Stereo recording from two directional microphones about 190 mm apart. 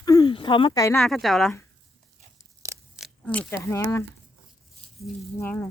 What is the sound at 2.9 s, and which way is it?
Speech, 5° left (ahead or behind).